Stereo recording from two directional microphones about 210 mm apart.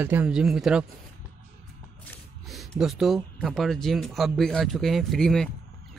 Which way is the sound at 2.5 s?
Centre (ahead or behind).